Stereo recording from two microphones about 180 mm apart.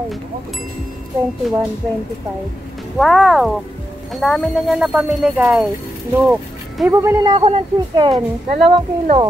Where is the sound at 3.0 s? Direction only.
Centre (ahead or behind).